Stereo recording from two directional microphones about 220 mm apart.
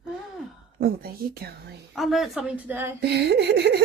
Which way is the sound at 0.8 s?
45° right (ahead or behind).